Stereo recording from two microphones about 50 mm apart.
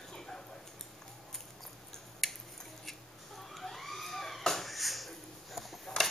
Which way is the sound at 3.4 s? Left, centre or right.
Centre.